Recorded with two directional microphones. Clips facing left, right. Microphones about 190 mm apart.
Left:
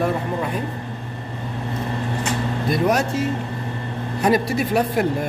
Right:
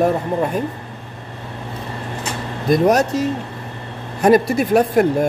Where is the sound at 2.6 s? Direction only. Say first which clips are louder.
Right 6 dB; 40° right (ahead or behind).